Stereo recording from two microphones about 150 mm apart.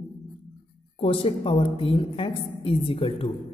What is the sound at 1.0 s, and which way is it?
A woman's voice, 40° left (ahead or behind).